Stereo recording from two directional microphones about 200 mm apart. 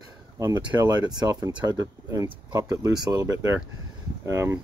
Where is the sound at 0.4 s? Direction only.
10° right (ahead or behind).